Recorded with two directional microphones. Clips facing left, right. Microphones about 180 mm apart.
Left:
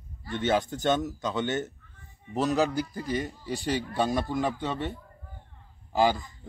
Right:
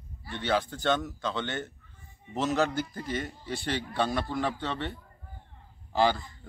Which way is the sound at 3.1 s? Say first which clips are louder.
Left 3 dB; 15° left (ahead or behind).